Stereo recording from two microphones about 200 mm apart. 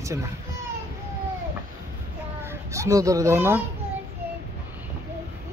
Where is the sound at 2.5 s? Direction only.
15° right (ahead or behind).